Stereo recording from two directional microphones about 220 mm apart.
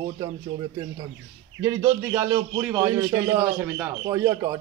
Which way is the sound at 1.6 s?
15° right (ahead or behind).